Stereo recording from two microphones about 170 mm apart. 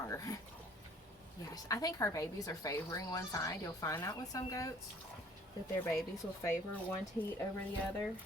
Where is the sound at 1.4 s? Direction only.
20° left (ahead or behind).